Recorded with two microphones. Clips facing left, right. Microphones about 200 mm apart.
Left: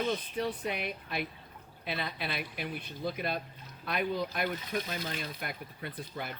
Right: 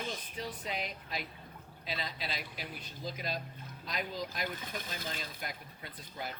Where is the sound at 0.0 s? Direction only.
65° left (ahead or behind).